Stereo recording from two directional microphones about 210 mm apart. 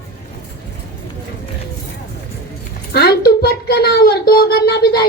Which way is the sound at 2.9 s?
50° left (ahead or behind).